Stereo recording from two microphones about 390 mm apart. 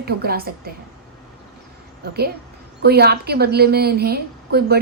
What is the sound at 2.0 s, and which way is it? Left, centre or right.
A woman's voice, right.